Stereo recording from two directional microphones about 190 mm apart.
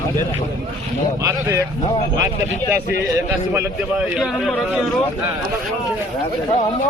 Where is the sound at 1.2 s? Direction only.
15° right (ahead or behind).